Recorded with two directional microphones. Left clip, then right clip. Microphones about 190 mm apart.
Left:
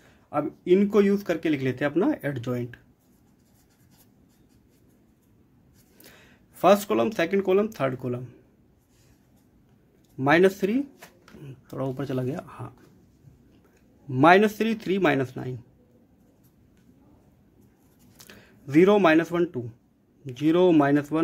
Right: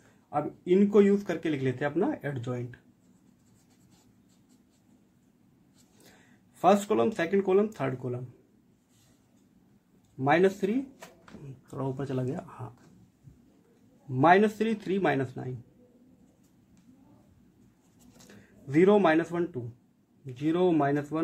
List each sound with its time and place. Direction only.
0.3 s speech: 35° left (ahead or behind)
6.6 s speech: 35° left (ahead or behind)
10.1 s speech: 35° left (ahead or behind)
11.7 s speech: 30° left (ahead or behind)
14.1 s speech: 35° left (ahead or behind)
18.1 s a man's voice: 40° left (ahead or behind)